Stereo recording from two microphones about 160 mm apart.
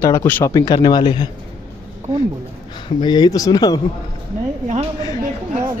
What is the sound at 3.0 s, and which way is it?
Speech, 25° left (ahead or behind).